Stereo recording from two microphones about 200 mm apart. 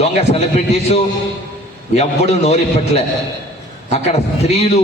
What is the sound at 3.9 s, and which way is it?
Speech, 35° left (ahead or behind).